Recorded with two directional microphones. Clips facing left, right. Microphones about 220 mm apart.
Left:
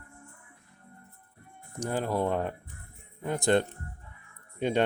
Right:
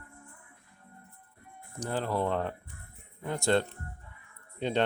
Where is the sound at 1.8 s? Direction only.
15° left (ahead or behind).